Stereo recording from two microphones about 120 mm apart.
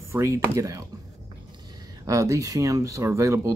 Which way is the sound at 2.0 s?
25° right (ahead or behind).